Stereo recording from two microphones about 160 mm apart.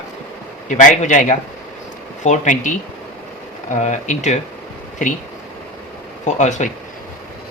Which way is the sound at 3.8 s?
50° left (ahead or behind).